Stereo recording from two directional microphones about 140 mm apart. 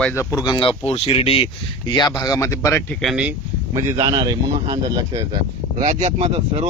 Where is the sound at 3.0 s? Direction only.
5° right (ahead or behind).